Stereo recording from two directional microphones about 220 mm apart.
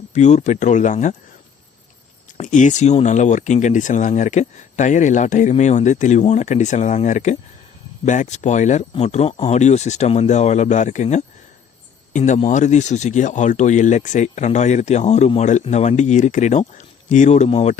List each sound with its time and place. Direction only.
0.1 s speech: 30° left (ahead or behind)
2.4 s speech: 35° left (ahead or behind)